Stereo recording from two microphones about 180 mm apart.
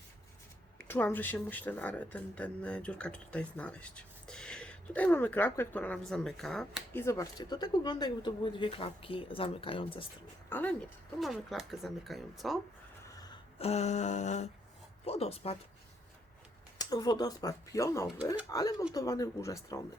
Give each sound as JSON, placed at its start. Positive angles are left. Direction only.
{"t": 0.9, "sound": "speech", "side_deg": 10}
{"t": 7.0, "sound": "speech", "side_deg": 20}
{"t": 10.5, "sound": "speech", "side_deg": 10}
{"t": 11.2, "sound": "speech", "side_deg": 0}
{"t": 13.1, "sound": "gasp", "side_deg": 20}
{"t": 13.6, "sound": "a sound", "side_deg": 35}
{"t": 16.8, "sound": "speech", "side_deg": 20}